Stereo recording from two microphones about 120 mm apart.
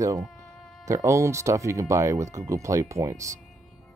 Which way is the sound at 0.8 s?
25° right (ahead or behind).